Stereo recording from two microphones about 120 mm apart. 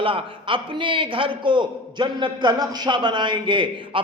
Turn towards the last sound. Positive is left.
turn(degrees=-45)  # may be behind; listen again after turning